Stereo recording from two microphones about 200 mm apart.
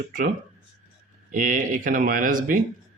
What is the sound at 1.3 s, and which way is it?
Speech, 40° right (ahead or behind).